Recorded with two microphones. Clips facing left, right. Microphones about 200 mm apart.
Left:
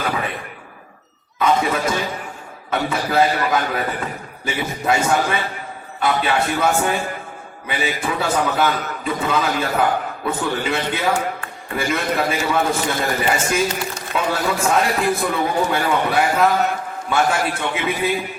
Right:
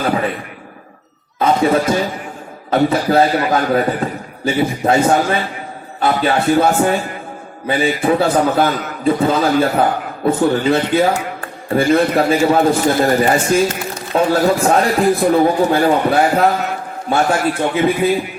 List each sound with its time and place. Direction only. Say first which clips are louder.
1.4 s a man's voice: right 5 dB; 35° right (ahead or behind)